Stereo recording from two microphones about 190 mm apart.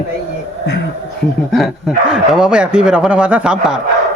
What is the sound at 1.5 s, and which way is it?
Speech, centre (ahead or behind).